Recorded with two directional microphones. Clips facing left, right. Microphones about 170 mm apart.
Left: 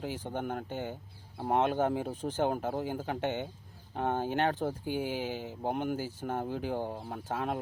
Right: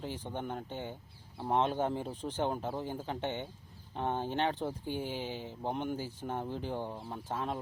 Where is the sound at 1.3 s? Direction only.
50° left (ahead or behind).